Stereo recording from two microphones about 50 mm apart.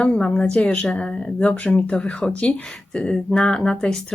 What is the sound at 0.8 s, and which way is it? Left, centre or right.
Speech, centre.